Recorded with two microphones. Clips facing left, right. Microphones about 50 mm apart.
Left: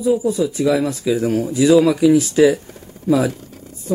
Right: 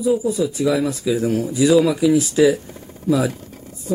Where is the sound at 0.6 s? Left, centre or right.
Centre.